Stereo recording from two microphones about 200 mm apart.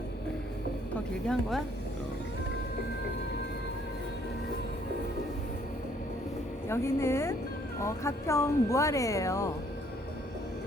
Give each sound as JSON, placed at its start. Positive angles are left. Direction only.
{"t": 1.3, "sound": "speech", "side_deg": 0}
{"t": 6.7, "sound": "speech", "side_deg": 15}